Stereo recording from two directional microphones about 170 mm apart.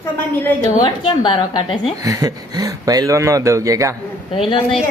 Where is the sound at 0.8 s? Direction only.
30° left (ahead or behind).